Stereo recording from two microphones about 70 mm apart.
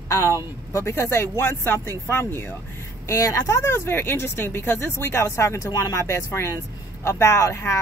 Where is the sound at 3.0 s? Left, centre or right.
Left.